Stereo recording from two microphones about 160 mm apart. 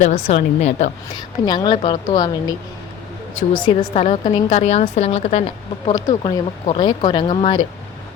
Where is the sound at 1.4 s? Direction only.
25° left (ahead or behind).